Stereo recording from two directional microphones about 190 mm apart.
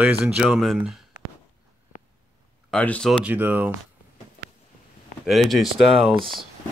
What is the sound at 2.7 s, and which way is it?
Speech, 5° left (ahead or behind).